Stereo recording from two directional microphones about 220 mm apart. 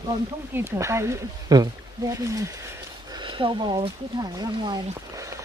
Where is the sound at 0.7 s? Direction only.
10° right (ahead or behind).